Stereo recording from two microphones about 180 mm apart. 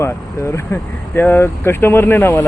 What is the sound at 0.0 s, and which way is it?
Speech, 15° left (ahead or behind).